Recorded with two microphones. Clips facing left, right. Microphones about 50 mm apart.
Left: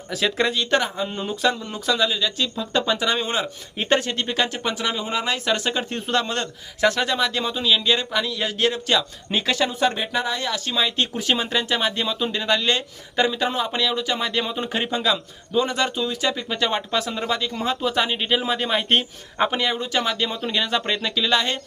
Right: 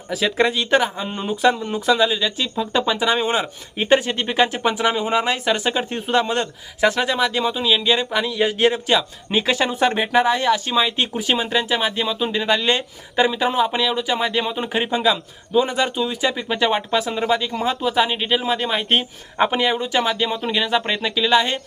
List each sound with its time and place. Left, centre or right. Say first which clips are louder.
0.1 s speech: right 3 dB; centre
9.6 s speech: right 3 dB; right
10.7 s speech: right 3 dB; centre